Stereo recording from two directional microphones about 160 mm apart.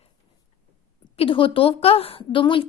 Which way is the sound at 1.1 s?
35° left (ahead or behind).